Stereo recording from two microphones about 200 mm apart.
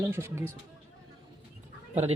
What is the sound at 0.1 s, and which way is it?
Speech, 15° right (ahead or behind).